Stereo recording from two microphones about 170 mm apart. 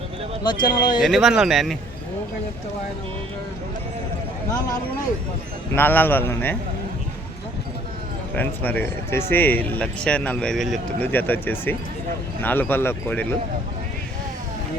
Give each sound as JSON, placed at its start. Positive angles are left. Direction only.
{"t": 0.4, "sound": "speech", "side_deg": 25}
{"t": 1.0, "sound": "speech", "side_deg": 0}
{"t": 5.7, "sound": "a man's voice", "side_deg": 10}
{"t": 8.4, "sound": "a man's voice", "side_deg": 10}